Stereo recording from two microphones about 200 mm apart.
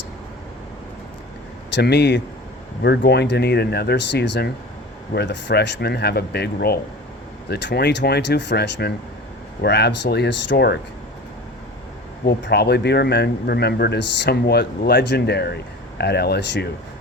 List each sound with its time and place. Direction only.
1.7 s speech: 55° left (ahead or behind)
12.2 s speech: 55° left (ahead or behind)